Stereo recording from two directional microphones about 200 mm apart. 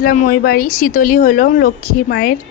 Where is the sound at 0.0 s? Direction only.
45° left (ahead or behind).